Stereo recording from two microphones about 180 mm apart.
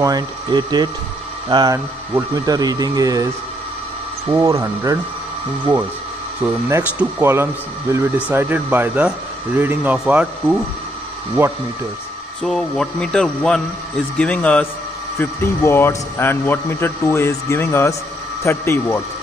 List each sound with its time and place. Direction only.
0.0 s speech: 25° right (ahead or behind)
4.3 s speech: 15° right (ahead or behind)
6.4 s speech: 5° right (ahead or behind)
12.4 s a man's voice: 5° left (ahead or behind)